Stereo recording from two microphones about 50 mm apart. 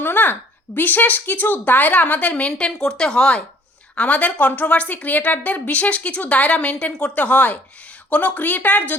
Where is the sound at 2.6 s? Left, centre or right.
Centre.